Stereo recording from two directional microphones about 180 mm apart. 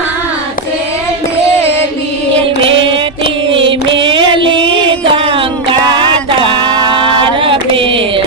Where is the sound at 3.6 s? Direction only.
30° right (ahead or behind).